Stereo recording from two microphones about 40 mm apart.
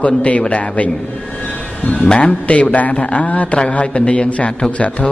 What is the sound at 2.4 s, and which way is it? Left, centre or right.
A man's voice, left.